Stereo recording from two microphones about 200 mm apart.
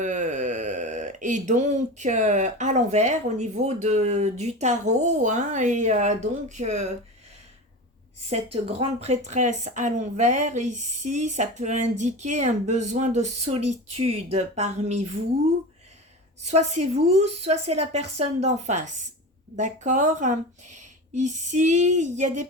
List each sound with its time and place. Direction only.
0.0 s speech: 35° right (ahead or behind)
8.3 s speech: 30° right (ahead or behind)
16.4 s speech: 35° right (ahead or behind)